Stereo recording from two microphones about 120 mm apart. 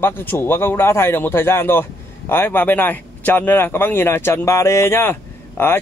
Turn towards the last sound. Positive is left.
turn(degrees=20)  # may be behind; listen again after turning